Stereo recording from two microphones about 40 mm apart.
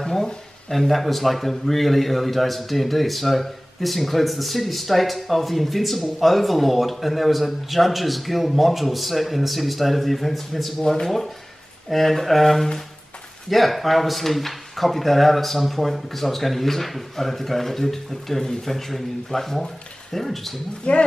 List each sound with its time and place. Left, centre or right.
0.0 s a sound: centre
0.7 s a man's voice: centre
10.8 s speech: centre
11.9 s a man's voice: centre
20.9 s speech: left